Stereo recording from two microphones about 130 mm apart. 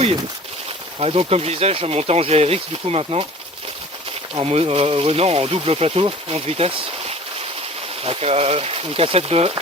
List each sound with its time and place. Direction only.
0.9 s speech: 45° right (ahead or behind)
4.4 s speech: 50° right (ahead or behind)